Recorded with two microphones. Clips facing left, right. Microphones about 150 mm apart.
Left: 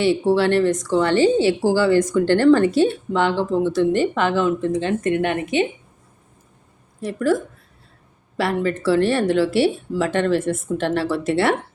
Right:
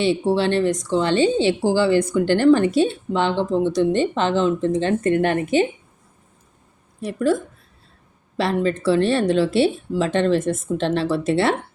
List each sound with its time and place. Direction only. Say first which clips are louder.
0.0 s speech: left 2 dB; 20° right (ahead or behind); by 5.6 s 35° right (ahead or behind)
7.1 s speech: even; 20° right (ahead or behind)
8.4 s speech: right 1 dB; 25° right (ahead or behind)